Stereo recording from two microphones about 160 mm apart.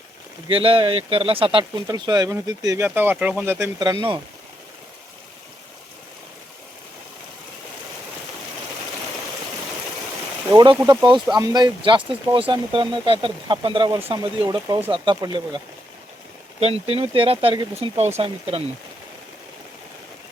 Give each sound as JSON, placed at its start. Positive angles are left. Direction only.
{"t": 0.4, "sound": "speech", "side_deg": -35}
{"t": 10.5, "sound": "speech", "side_deg": -25}
{"t": 16.6, "sound": "speech", "side_deg": -40}